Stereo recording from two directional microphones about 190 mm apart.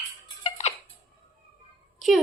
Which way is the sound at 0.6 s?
35° left (ahead or behind).